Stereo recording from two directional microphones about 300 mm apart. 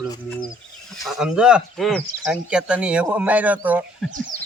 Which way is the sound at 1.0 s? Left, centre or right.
Centre.